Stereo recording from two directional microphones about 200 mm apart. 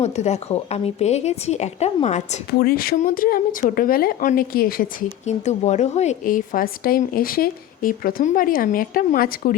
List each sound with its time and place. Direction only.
0.0 s a woman's voice: 35° left (ahead or behind)
2.5 s a woman's voice: 50° left (ahead or behind)
5.2 s a woman's voice: 35° left (ahead or behind)